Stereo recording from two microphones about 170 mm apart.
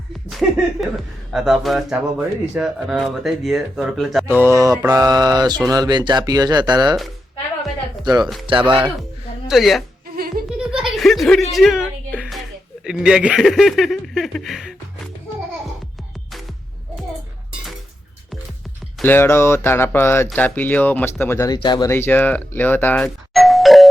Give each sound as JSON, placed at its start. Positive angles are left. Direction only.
{"t": 0.3, "sound": "speech", "side_deg": 0}
{"t": 4.3, "sound": "a sound", "side_deg": -15}
{"t": 4.9, "sound": "speech", "side_deg": -20}
{"t": 8.0, "sound": "speech", "side_deg": -25}
{"t": 9.5, "sound": "speech", "side_deg": 0}
{"t": 10.2, "sound": "music", "side_deg": -60}
{"t": 10.6, "sound": "a sound", "side_deg": -5}
{"t": 11.5, "sound": "music", "side_deg": 0}
{"t": 12.8, "sound": "speech", "side_deg": -5}
{"t": 19.0, "sound": "speech", "side_deg": 15}